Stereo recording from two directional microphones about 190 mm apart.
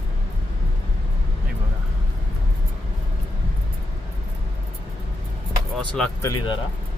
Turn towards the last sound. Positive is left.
turn(degrees=25)  # may be behind; listen again after turning